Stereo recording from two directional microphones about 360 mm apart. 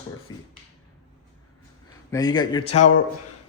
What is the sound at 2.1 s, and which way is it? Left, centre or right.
Speech, centre.